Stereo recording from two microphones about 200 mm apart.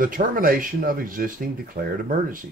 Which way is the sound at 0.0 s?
45° right (ahead or behind).